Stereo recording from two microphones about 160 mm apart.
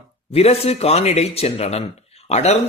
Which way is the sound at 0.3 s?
40° left (ahead or behind).